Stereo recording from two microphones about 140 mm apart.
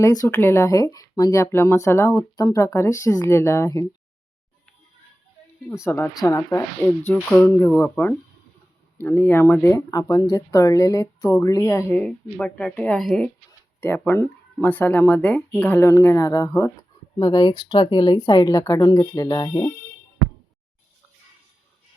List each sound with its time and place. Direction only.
0.0 s speech: 25° left (ahead or behind)
5.6 s speech: 20° left (ahead or behind)
7.1 s speech: 10° left (ahead or behind)
12.0 s a woman's voice: 10° left (ahead or behind)
13.8 s speech: 15° left (ahead or behind)